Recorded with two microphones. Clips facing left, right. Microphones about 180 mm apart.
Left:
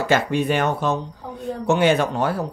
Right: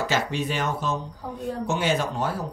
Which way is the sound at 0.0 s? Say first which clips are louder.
Left 6 dB; 55° left (ahead or behind).